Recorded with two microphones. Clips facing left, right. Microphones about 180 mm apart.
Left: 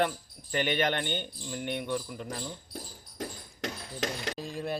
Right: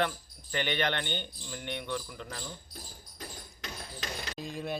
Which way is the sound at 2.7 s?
85° left.